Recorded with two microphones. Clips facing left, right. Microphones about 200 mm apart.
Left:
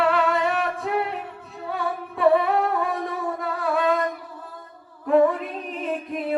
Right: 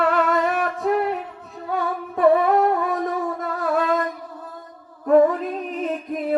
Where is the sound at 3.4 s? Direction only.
45° right (ahead or behind).